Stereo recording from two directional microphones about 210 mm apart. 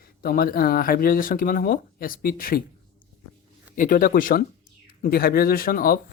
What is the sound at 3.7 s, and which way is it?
Speech, 40° left (ahead or behind).